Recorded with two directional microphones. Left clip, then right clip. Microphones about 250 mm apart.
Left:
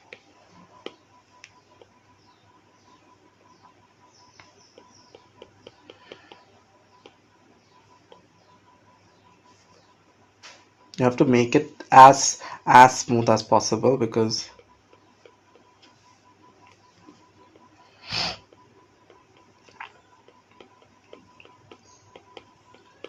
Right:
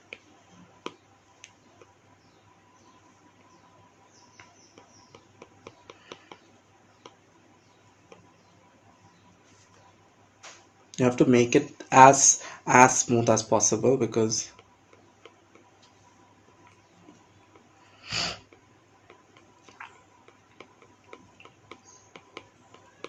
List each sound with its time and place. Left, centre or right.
10.9 s speech: centre
18.0 s wheeze: centre